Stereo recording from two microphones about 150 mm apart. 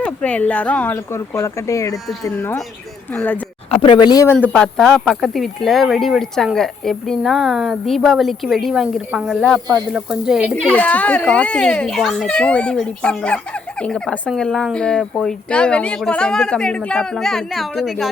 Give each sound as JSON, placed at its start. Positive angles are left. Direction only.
{"t": 0.0, "sound": "speech", "side_deg": 10}
{"t": 3.7, "sound": "speech", "side_deg": 35}
{"t": 4.5, "sound": "a child's voice", "side_deg": 5}
{"t": 10.8, "sound": "a child's voice", "side_deg": 10}